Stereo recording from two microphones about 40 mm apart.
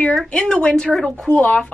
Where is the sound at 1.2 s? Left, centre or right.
Left.